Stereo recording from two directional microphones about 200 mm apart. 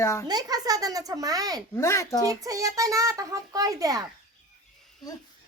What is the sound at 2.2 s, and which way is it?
A child's voice, 15° right (ahead or behind).